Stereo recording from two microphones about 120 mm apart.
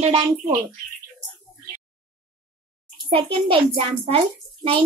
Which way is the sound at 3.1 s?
50° right (ahead or behind).